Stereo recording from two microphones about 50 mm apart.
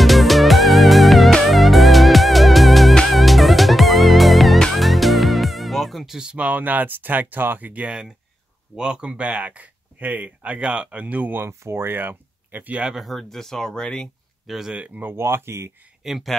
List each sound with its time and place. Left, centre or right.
0.0 s music: centre
6.3 s speech: right
8.7 s speech: centre; by 11.4 s right
11.4 s speech: right
12.9 s speech: centre
14.5 s speech: centre
15.1 s speech: right
16.0 s speech: centre